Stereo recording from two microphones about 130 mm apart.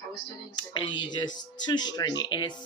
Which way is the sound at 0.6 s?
35° left (ahead or behind).